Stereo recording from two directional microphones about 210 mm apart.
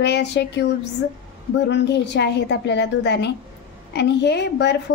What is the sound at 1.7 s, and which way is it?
A woman's voice, 55° left (ahead or behind).